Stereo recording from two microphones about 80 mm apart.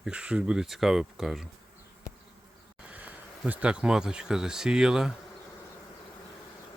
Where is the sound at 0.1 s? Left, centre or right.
Centre.